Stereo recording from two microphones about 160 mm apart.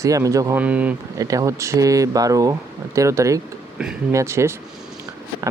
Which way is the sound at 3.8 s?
5° right (ahead or behind).